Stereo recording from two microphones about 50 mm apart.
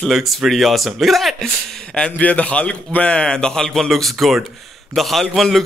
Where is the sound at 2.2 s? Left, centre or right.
Left.